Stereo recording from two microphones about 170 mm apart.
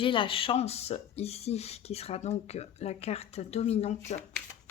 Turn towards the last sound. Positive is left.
turn(degrees=40)  # may be behind; listen again after turning